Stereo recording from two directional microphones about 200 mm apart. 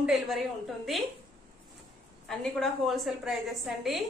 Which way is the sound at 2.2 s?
Centre (ahead or behind).